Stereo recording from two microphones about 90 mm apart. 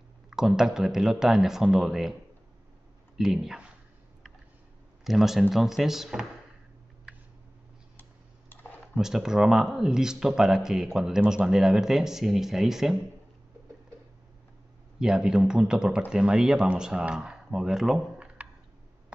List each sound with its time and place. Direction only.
0.3 s speech: 5° right (ahead or behind)
3.2 s speech: 5° right (ahead or behind)
5.0 s speech: 5° right (ahead or behind)
8.0 s clicking: 20° left (ahead or behind)
8.9 s speech: 5° right (ahead or behind)
15.0 s speech: 10° right (ahead or behind)